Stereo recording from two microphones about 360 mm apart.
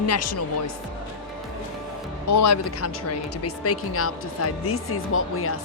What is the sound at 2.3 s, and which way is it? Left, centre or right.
Speech, left.